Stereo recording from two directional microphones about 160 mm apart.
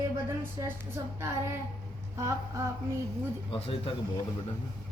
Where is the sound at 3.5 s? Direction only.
35° left (ahead or behind).